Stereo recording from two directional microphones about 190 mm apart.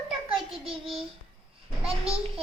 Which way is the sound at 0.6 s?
30° right (ahead or behind).